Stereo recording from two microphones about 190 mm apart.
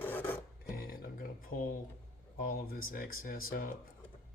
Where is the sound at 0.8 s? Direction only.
50° left (ahead or behind).